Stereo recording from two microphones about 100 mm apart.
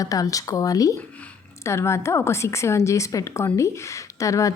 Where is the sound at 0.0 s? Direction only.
35° left (ahead or behind).